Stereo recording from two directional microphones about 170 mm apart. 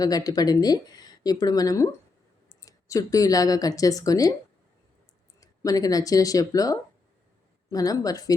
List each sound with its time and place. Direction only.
0.0 s speech: 20° left (ahead or behind)
5.4 s speech: 20° left (ahead or behind)